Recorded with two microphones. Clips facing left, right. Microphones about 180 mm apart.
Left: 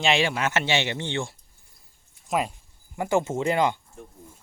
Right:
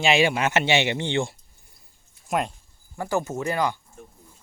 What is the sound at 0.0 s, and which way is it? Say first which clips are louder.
Speech: right 3 dB; 5° right (ahead or behind).